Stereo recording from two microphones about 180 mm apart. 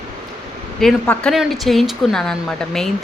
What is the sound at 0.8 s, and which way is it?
A woman's voice, 5° left (ahead or behind).